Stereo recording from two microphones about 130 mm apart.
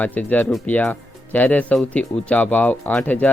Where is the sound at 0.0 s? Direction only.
10° left (ahead or behind).